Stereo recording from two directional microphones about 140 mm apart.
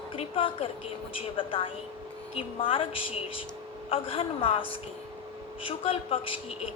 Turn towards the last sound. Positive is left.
turn(degrees=40)  # may be behind; listen again after turning